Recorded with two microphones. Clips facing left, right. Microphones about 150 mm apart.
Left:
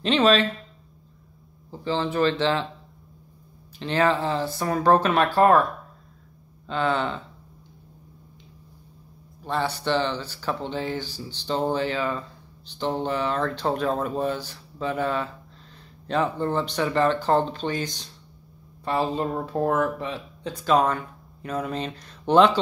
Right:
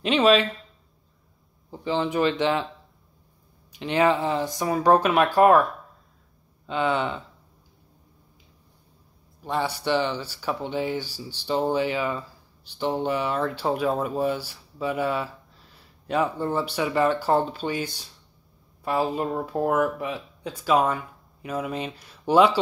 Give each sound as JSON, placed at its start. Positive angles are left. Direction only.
{"t": 0.0, "sound": "speech", "side_deg": -10}
{"t": 1.7, "sound": "speech", "side_deg": -15}
{"t": 3.7, "sound": "speech", "side_deg": -15}
{"t": 6.7, "sound": "speech", "side_deg": -10}
{"t": 9.4, "sound": "speech", "side_deg": -10}